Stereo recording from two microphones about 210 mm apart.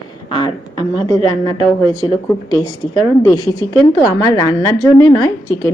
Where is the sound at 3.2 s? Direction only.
15° left (ahead or behind).